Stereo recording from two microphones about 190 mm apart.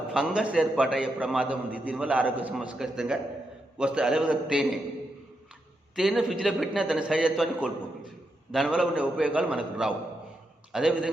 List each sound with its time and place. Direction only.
0.1 s a man's voice: 5° right (ahead or behind)
6.0 s a man's voice: centre (ahead or behind)